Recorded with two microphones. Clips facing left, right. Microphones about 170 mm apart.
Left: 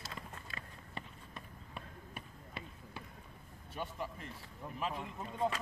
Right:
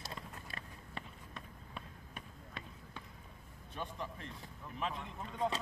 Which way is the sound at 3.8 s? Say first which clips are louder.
Left 1 dB; 5° left (ahead or behind).